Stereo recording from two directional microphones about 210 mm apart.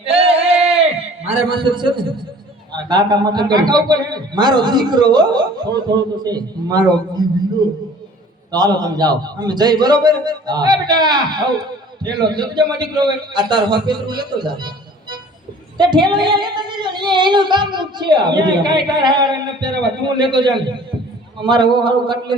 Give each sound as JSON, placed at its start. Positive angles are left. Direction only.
{"t": 0.0, "sound": "a sound", "side_deg": -30}
{"t": 2.7, "sound": "singing", "side_deg": -20}
{"t": 8.5, "sound": "singing", "side_deg": -20}
{"t": 15.8, "sound": "singing", "side_deg": -20}